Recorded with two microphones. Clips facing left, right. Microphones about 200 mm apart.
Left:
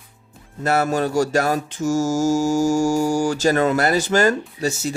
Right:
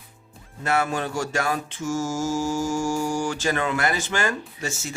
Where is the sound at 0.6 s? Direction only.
40° left (ahead or behind).